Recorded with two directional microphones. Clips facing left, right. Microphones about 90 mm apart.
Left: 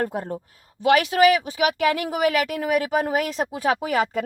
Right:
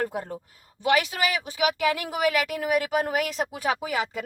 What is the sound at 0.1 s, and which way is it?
Speech, 35° left (ahead or behind).